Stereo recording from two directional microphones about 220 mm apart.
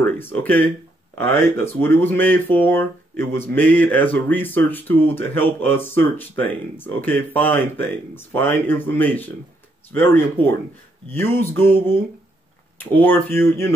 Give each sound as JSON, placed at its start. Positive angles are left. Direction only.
{"t": 0.0, "sound": "speech", "side_deg": 10}